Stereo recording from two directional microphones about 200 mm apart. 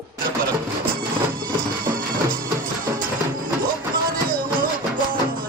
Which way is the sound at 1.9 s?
45° right (ahead or behind).